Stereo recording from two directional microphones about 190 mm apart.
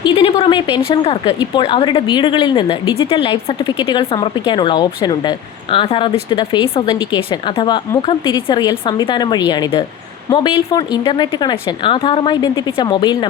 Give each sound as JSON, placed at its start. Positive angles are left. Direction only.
{"t": 0.0, "sound": "a woman's voice", "side_deg": 30}